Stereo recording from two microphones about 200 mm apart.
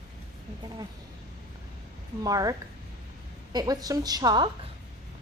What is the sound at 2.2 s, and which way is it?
A woman's voice, 20° right (ahead or behind).